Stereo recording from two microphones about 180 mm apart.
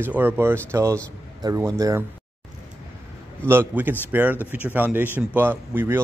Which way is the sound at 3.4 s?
10° right (ahead or behind).